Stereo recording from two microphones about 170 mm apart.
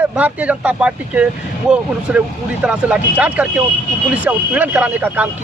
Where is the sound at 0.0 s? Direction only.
10° right (ahead or behind).